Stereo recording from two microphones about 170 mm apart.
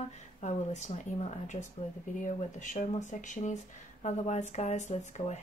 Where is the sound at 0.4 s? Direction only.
45° left (ahead or behind).